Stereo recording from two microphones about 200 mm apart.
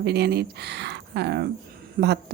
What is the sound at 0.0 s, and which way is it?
Speech, 55° right (ahead or behind).